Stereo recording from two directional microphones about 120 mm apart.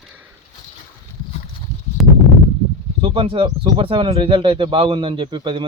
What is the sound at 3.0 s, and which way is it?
Speech, 45° right (ahead or behind).